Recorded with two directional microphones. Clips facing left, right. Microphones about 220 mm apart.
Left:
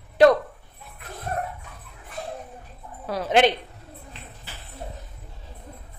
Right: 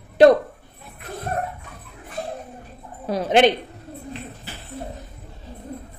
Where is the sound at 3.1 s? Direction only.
20° right (ahead or behind).